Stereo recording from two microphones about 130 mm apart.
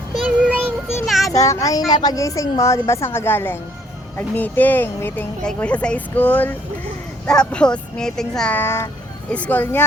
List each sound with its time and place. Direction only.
0.3 s child singing: 10° right (ahead or behind)
1.0 s a sound: centre (ahead or behind)
1.3 s a woman's voice: 25° left (ahead or behind); by 8.5 s 5° left (ahead or behind)
8.5 s speech: 20° left (ahead or behind)